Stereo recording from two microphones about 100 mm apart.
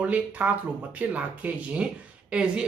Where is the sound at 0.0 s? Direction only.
15° right (ahead or behind).